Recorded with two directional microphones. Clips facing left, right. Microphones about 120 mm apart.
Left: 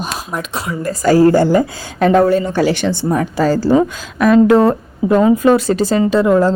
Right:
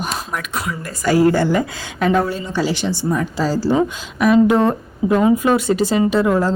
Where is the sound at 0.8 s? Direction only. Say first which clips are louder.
Left 5 dB; 40° left (ahead or behind); by 3.6 s 55° left (ahead or behind).